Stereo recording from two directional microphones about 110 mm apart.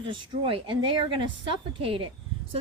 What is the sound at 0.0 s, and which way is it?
A woman's voice, 50° right (ahead or behind).